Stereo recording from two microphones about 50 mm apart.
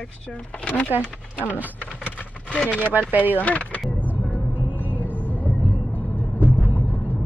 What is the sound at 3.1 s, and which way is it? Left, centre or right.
Speech, right.